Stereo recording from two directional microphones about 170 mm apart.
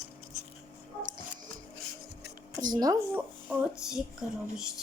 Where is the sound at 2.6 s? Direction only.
25° right (ahead or behind).